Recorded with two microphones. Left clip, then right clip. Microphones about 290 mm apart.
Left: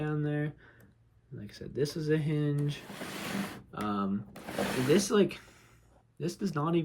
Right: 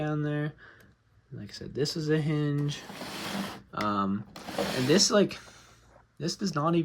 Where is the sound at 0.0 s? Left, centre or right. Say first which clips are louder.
Right 2 dB; centre.